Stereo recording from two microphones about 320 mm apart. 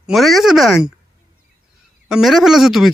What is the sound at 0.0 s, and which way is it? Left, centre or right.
Speech, centre.